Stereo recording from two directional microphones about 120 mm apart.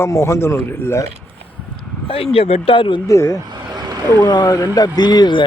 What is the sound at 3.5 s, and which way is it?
Vehicle, 35° right (ahead or behind).